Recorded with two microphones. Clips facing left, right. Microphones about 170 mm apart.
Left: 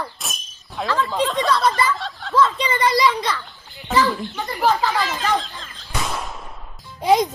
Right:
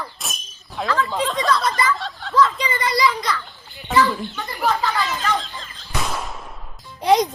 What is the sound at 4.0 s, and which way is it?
Speech, centre (ahead or behind).